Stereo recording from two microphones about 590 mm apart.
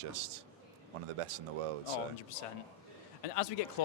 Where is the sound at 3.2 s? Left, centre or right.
Left.